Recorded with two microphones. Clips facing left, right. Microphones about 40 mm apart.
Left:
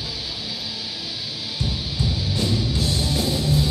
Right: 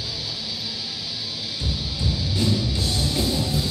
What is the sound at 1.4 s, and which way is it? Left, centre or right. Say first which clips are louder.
Music: left 3 dB; centre.